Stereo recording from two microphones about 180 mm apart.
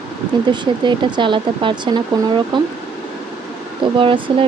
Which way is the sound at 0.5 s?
25° right (ahead or behind).